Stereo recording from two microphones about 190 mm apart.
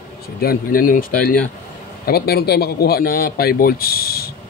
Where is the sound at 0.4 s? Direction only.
50° left (ahead or behind).